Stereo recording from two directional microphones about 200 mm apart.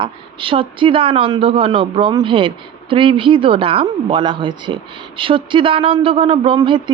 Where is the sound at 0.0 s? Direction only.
25° right (ahead or behind).